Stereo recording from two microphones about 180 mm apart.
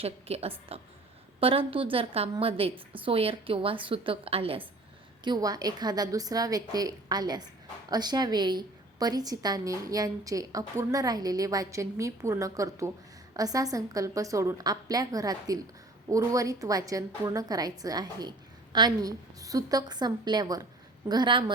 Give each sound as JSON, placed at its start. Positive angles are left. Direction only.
{"t": 0.0, "sound": "a woman's voice", "side_deg": -35}